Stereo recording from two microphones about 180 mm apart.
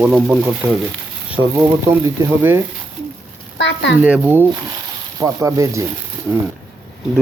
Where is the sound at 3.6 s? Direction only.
90° left.